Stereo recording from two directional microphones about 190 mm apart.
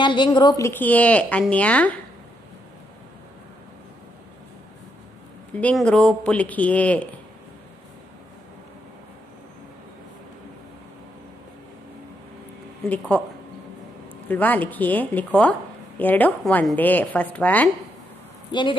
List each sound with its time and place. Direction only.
0.0 s a woman's voice: 25° left (ahead or behind); by 2.0 s 5° left (ahead or behind)
5.5 s a woman's voice: 5° left (ahead or behind)
12.8 s a woman's voice: 5° left (ahead or behind)
14.3 s a woman's voice: 10° left (ahead or behind)
18.5 s speech: 25° left (ahead or behind)